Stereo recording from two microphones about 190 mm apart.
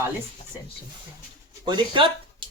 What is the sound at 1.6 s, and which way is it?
Speech, 25° right (ahead or behind).